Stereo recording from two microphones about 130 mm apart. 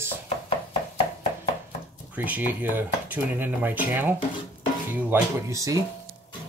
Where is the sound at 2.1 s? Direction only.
10° right (ahead or behind).